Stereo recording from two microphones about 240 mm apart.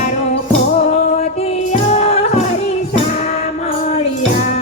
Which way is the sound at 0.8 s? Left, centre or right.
Left.